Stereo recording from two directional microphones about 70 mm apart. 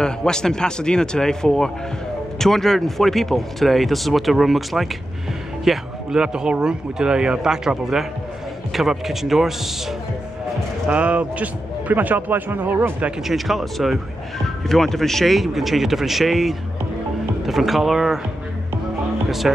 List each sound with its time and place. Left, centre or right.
0.0 s a man's voice: centre
10.9 s a man's voice: centre
13.3 s speech: centre
19.2 s music: centre